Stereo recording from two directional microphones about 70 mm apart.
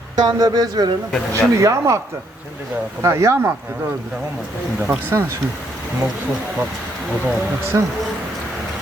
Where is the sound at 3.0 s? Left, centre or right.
Right.